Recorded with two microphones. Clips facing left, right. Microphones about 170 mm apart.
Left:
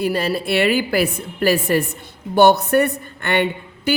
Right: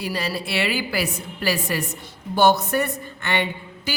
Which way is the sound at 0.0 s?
55° left (ahead or behind).